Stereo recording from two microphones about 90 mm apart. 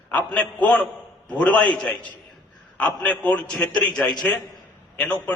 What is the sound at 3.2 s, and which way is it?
Speech, 15° left (ahead or behind).